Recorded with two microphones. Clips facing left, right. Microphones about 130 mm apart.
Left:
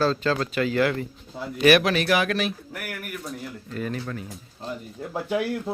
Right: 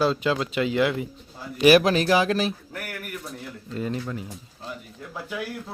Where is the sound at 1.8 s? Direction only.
30° right (ahead or behind).